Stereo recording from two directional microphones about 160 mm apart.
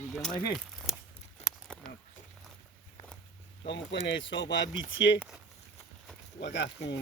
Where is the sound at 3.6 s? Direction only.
90° left.